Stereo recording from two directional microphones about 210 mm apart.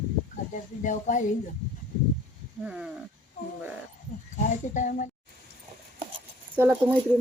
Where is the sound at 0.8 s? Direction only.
35° left (ahead or behind).